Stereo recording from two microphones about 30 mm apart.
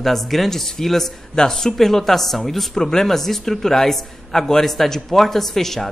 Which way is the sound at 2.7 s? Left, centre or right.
Centre.